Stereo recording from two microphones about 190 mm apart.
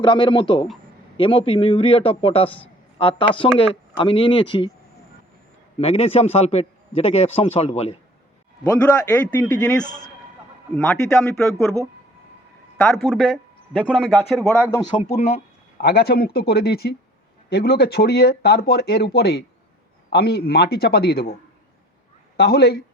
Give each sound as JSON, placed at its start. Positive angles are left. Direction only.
{"t": 0.0, "sound": "a man's voice", "side_deg": 25}
{"t": 5.8, "sound": "a man's voice", "side_deg": 30}
{"t": 8.8, "sound": "a man's voice", "side_deg": 10}
{"t": 12.7, "sound": "speech", "side_deg": 5}
{"t": 14.8, "sound": "a man's voice", "side_deg": 30}
{"t": 15.8, "sound": "speech", "side_deg": 55}
{"t": 22.4, "sound": "speech", "side_deg": 60}